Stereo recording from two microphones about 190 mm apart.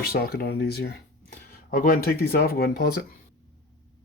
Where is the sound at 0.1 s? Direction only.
55° left (ahead or behind).